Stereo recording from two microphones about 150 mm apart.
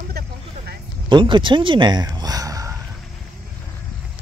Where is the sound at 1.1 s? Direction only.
30° right (ahead or behind).